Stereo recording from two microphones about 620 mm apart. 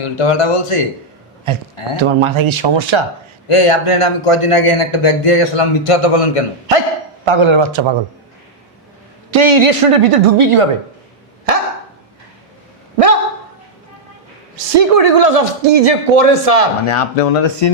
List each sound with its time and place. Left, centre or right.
0.0 s a man's voice: left
1.5 s a woman's voice: right
3.5 s a man's voice: left
6.7 s speech: right
7.3 s a woman's voice: right
9.3 s a woman's voice: right
11.5 s dog: right
14.7 s speech: right
16.8 s a man's voice: left